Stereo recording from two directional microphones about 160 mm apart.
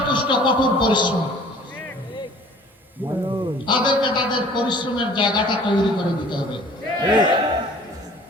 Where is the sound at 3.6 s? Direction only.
30° left (ahead or behind).